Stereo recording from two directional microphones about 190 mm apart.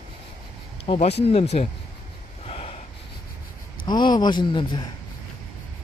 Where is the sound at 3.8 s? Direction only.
25° left (ahead or behind).